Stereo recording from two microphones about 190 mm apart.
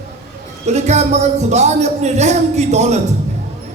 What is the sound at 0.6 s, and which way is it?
Speech, 35° right (ahead or behind).